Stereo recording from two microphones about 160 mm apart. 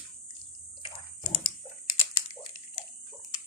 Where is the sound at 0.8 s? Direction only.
30° left (ahead or behind).